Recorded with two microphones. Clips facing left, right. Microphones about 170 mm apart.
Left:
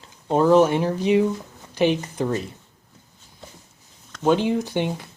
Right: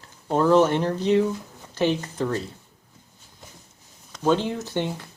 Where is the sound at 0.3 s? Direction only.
15° left (ahead or behind).